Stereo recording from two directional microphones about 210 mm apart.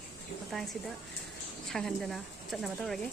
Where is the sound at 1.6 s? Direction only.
Centre (ahead or behind).